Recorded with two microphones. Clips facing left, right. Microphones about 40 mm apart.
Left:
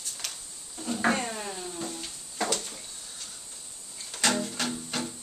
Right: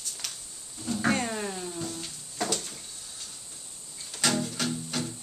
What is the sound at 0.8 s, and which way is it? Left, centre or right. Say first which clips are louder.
Cat: left 1 dB; centre.